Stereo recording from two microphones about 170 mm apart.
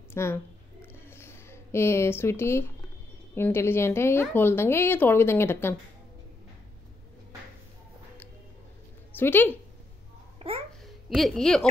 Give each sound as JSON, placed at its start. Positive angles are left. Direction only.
{"t": 0.1, "sound": "a woman's voice", "side_deg": 15}
{"t": 0.9, "sound": "a sound", "side_deg": 15}
{"t": 3.3, "sound": "a woman's voice", "side_deg": 15}
{"t": 9.1, "sound": "speech", "side_deg": 10}
{"t": 10.4, "sound": "babbling", "side_deg": -35}
{"t": 11.1, "sound": "a woman's voice", "side_deg": 0}